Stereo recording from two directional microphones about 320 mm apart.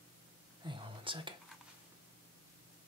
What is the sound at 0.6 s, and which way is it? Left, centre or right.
Whispering, centre.